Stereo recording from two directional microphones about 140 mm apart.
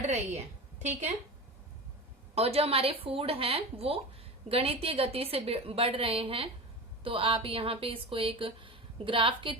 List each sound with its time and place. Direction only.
0.8 s a woman's voice: 55° right (ahead or behind)
2.3 s a woman's voice: 45° right (ahead or behind)